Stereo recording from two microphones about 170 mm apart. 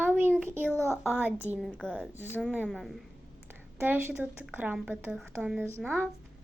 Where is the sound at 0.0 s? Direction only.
10° right (ahead or behind).